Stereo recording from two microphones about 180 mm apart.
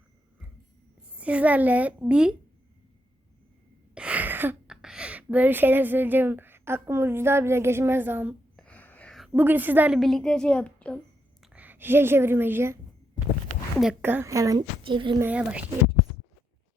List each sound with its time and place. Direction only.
1.2 s a woman's voice: 10° right (ahead or behind)
3.9 s a woman's voice: 5° right (ahead or behind)
8.5 s a woman's voice: 5° left (ahead or behind)
11.4 s a woman's voice: 10° right (ahead or behind); by 15.2 s 25° right (ahead or behind)
15.2 s a woman's voice: 5° right (ahead or behind)